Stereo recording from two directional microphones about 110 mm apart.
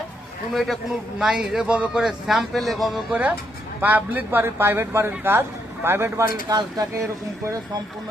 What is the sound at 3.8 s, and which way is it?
Speech, 15° right (ahead or behind).